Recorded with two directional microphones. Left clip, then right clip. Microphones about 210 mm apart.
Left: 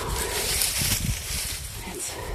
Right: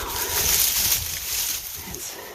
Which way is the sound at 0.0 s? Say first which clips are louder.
Right 1 dB; 10° left (ahead or behind).